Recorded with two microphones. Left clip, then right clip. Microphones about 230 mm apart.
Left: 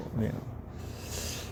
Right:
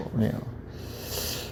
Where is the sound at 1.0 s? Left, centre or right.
Centre.